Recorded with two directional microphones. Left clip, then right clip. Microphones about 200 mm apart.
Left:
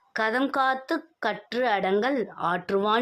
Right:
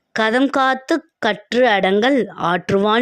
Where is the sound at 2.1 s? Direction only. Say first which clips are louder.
Right 9 dB; 45° right (ahead or behind).